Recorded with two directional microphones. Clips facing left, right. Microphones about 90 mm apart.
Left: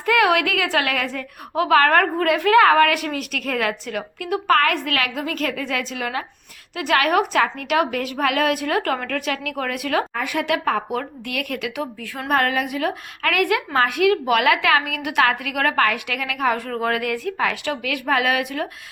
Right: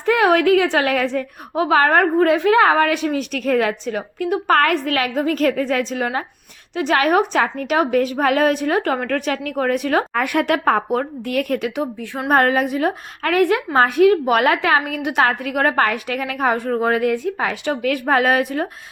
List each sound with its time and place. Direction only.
0.0 s a woman's voice: 30° right (ahead or behind)
4.5 s a woman's voice: 40° right (ahead or behind)
9.0 s a woman's voice: 35° right (ahead or behind)
10.2 s a woman's voice: 55° right (ahead or behind); by 18.7 s 35° right (ahead or behind)